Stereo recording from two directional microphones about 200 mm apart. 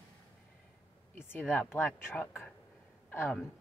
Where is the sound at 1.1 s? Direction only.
10° left (ahead or behind).